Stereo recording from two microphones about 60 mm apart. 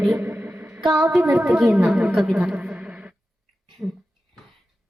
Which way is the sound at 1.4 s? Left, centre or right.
Centre.